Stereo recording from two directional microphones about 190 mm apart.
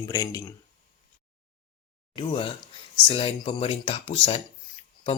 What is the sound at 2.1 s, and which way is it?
Speech, 25° left (ahead or behind).